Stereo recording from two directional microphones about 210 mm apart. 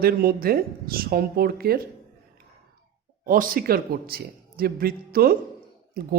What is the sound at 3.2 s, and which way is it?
Speech, 40° right (ahead or behind).